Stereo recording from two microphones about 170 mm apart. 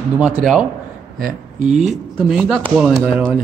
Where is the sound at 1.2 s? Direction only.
45° right (ahead or behind).